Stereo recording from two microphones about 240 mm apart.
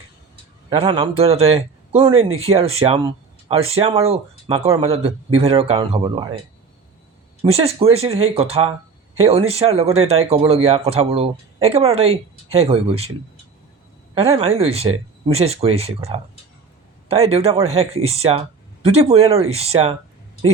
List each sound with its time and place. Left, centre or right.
0.7 s speech: right
7.4 s speech: right
14.2 s speech: right